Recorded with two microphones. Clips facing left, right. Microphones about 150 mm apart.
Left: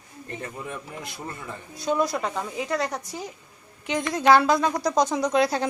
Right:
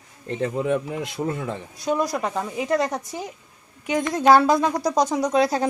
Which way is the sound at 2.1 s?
10° right (ahead or behind).